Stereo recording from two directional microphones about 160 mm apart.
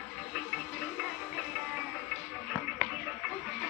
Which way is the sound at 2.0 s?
Centre (ahead or behind).